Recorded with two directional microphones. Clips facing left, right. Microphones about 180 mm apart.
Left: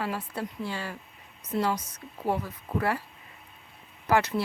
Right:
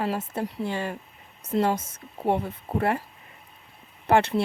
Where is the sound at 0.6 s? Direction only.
20° right (ahead or behind).